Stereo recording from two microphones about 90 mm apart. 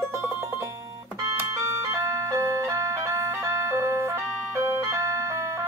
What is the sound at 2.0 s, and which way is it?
Ice cream truck, 35° right (ahead or behind).